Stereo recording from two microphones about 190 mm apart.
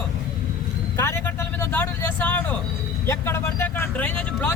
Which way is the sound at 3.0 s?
15° left (ahead or behind).